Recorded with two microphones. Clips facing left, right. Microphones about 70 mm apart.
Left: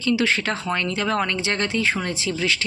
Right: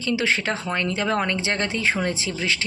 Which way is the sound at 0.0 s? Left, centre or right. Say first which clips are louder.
Left 2 dB; right.